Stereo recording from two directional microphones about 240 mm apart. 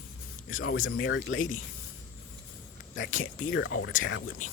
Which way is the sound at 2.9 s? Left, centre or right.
Left.